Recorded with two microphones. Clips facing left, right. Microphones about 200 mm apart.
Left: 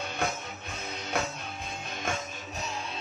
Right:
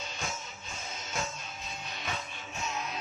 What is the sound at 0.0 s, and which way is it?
Music, 60° left (ahead or behind).